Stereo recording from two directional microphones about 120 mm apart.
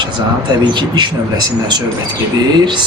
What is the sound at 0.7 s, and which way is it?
Speech, 40° right (ahead or behind).